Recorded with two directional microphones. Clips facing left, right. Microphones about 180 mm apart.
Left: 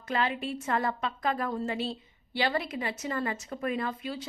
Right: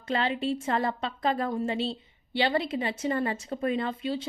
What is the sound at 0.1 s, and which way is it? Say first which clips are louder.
Speech: right 3 dB; 30° right (ahead or behind).